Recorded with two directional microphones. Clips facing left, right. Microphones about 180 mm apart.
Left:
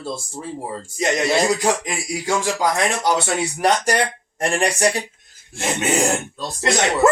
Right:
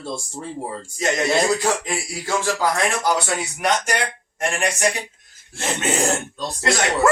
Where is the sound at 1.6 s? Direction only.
15° left (ahead or behind).